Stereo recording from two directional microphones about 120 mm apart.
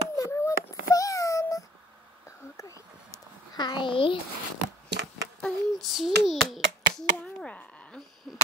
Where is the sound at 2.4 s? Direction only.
25° left (ahead or behind); by 4.1 s 45° left (ahead or behind).